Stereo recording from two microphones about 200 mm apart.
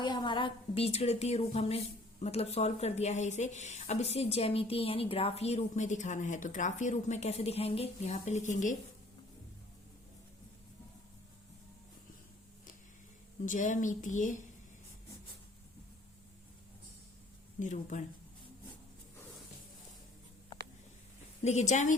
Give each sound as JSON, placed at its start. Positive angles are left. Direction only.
{"t": 0.0, "sound": "a woman's voice", "side_deg": 20}
{"t": 13.4, "sound": "speech", "side_deg": 40}
{"t": 17.6, "sound": "speech", "side_deg": 40}
{"t": 21.4, "sound": "speech", "side_deg": 35}